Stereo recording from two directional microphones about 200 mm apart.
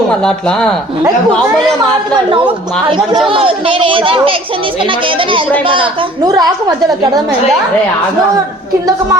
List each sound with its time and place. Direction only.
0.2 s speech: 5° left (ahead or behind)
2.1 s a child's voice: 25° right (ahead or behind)